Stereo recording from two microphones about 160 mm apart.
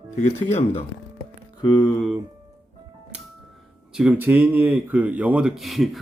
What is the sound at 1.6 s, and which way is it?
Speech, 30° left (ahead or behind).